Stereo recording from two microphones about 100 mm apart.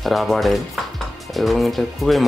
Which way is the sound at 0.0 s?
Centre (ahead or behind).